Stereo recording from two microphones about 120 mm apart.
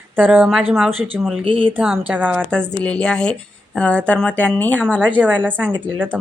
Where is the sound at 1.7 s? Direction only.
10° right (ahead or behind).